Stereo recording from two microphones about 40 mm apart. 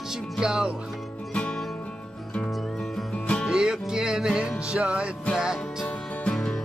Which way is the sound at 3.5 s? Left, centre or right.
Centre.